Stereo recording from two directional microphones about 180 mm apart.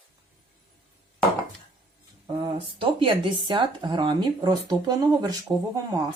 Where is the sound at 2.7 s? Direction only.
25° right (ahead or behind).